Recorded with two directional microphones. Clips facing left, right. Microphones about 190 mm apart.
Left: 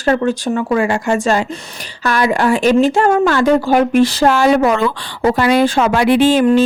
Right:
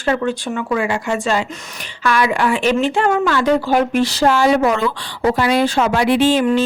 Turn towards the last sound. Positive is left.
turn(degrees=50)  # may be behind; listen again after turning